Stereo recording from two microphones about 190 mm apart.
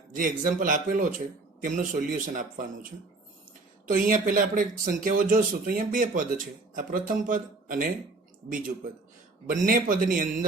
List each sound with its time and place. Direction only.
0.1 s speech: 45° right (ahead or behind)
3.8 s speech: 45° right (ahead or behind)